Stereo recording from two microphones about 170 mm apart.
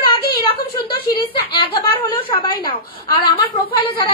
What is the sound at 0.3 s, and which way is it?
A woman's voice, 30° left (ahead or behind).